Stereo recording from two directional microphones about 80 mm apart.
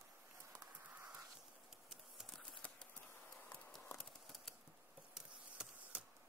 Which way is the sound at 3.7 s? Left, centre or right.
Centre.